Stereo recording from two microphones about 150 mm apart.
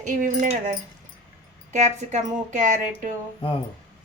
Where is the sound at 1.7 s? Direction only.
50° right (ahead or behind).